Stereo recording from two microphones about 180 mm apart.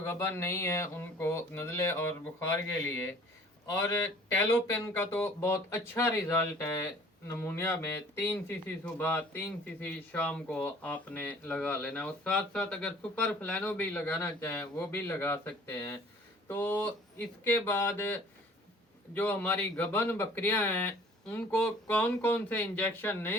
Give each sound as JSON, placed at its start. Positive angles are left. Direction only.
{"t": 0.0, "sound": "speech", "side_deg": 15}